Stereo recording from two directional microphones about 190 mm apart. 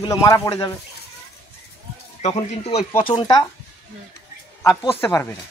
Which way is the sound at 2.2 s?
30° left (ahead or behind).